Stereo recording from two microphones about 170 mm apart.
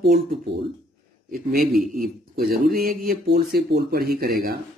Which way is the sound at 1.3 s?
60° right (ahead or behind).